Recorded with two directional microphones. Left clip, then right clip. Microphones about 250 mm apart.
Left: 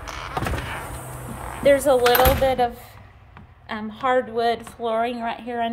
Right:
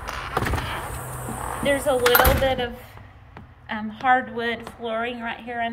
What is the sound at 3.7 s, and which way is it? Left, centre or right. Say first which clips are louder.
Speech: right 2 dB; centre.